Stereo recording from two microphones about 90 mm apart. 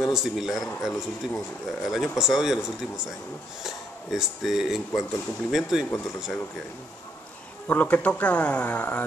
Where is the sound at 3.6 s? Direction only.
5° right (ahead or behind).